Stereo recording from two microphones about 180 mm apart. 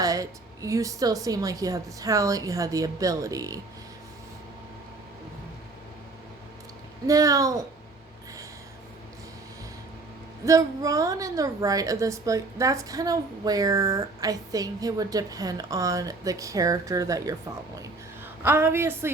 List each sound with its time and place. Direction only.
0.0 s a woman's voice: 20° right (ahead or behind)
7.1 s a woman's voice: 20° right (ahead or behind)
10.4 s a woman's voice: 20° right (ahead or behind)
18.4 s a woman's voice: 15° right (ahead or behind)